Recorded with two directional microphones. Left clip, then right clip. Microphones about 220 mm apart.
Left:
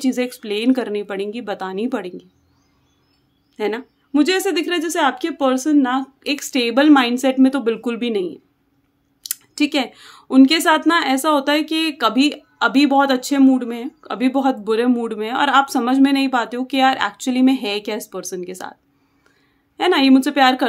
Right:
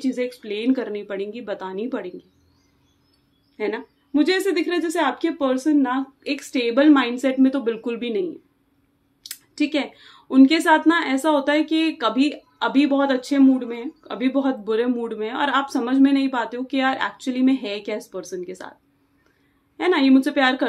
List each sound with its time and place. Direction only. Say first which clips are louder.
0.0 s a woman's voice: left 4 dB; 50° left (ahead or behind)
3.5 s a woman's voice: left 3 dB; 45° left (ahead or behind)
9.3 s a woman's voice: left 4 dB; 45° left (ahead or behind)
19.8 s a woman's voice: left 3 dB; 45° left (ahead or behind)